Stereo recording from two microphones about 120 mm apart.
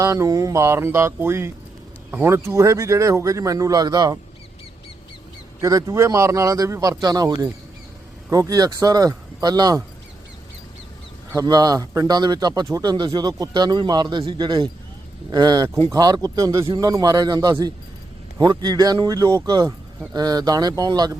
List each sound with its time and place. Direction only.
0.0 s a man's voice: 25° right (ahead or behind)
5.6 s a man's voice: 30° right (ahead or behind)
11.3 s speech: 30° right (ahead or behind)